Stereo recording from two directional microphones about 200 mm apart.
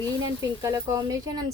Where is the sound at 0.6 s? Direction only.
15° right (ahead or behind).